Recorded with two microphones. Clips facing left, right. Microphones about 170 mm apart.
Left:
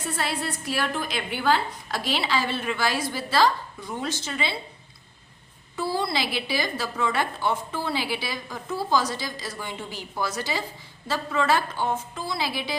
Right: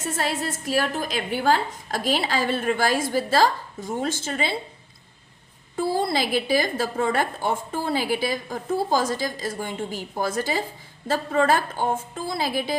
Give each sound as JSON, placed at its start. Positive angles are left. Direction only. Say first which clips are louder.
{"t": 0.0, "sound": "a woman's voice", "louder": "right 2 dB", "side_deg": -45}
{"t": 5.7, "sound": "a woman's voice", "louder": "right 3 dB", "side_deg": -50}